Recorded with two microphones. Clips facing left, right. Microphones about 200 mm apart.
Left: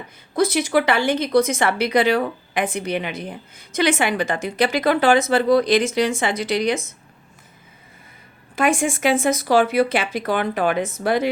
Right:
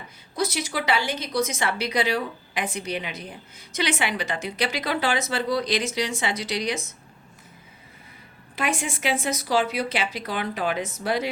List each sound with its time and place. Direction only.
0.3 s speech: 55° left (ahead or behind)
8.5 s speech: 50° left (ahead or behind)